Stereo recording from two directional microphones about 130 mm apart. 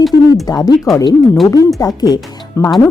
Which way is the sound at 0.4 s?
30° left (ahead or behind).